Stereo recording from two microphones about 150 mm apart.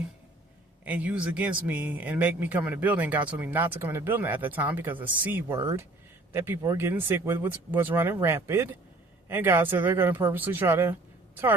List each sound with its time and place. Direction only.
0.9 s speech: 10° right (ahead or behind)